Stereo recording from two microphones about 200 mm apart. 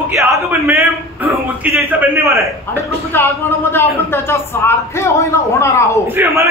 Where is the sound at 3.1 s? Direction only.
10° left (ahead or behind).